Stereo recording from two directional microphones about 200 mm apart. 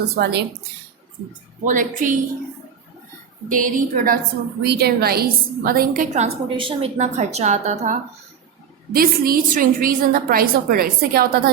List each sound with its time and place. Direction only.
0.1 s a woman's voice: 55° right (ahead or behind)
1.3 s a woman's voice: 40° right (ahead or behind)
3.5 s a woman's voice: 40° right (ahead or behind)
4.6 s a woman's voice: 55° right (ahead or behind)
6.2 s a woman's voice: 25° right (ahead or behind)
8.9 s a woman's voice: 45° right (ahead or behind)